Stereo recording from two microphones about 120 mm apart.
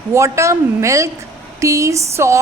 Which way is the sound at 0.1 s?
25° right (ahead or behind).